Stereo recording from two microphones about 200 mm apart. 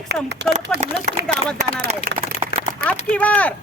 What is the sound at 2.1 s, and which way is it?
Speech, 45° right (ahead or behind).